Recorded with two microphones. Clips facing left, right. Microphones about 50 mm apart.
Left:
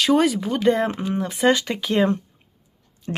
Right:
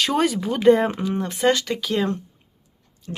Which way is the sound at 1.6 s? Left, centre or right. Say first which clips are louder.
Left 2 dB; centre.